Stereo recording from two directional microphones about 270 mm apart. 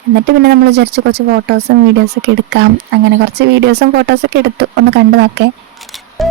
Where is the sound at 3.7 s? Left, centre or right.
Right.